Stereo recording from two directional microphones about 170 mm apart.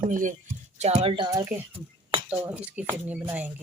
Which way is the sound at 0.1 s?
50° right (ahead or behind).